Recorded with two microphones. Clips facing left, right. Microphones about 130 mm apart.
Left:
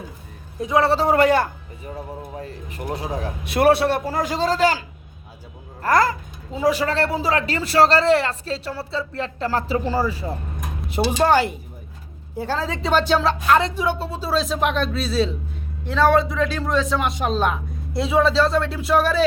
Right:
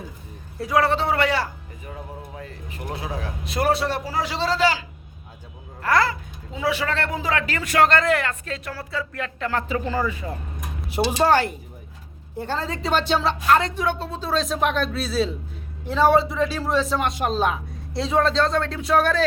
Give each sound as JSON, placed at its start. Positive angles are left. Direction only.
{"t": 0.6, "sound": "a man's voice", "side_deg": 25}
{"t": 0.9, "sound": "a man's voice", "side_deg": 45}
{"t": 1.8, "sound": "a man's voice", "side_deg": 30}
{"t": 3.4, "sound": "a man's voice", "side_deg": 65}
{"t": 5.8, "sound": "a man's voice", "side_deg": 45}
{"t": 11.2, "sound": "speech", "side_deg": 0}